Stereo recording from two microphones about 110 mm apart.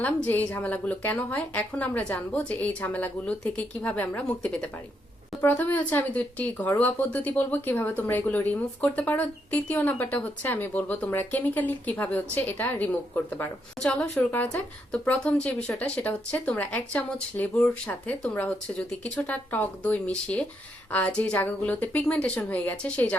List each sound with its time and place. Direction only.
0.0 s speech: 15° left (ahead or behind)
13.7 s a woman's voice: 5° left (ahead or behind)
14.2 s speech: 15° left (ahead or behind)